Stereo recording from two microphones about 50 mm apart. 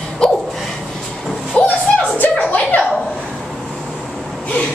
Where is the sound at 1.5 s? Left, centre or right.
Left.